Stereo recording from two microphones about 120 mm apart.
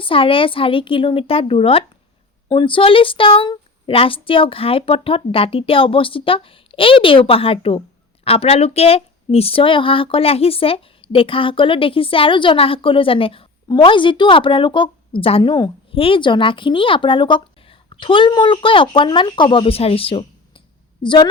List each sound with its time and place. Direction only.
0.0 s a woman's voice: 45° left (ahead or behind)
21.0 s a woman's voice: 40° left (ahead or behind)